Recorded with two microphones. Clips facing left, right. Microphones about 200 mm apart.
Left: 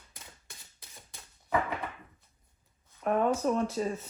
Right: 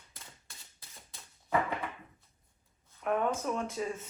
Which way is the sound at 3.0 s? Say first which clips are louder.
Left 4 dB; 35° left (ahead or behind).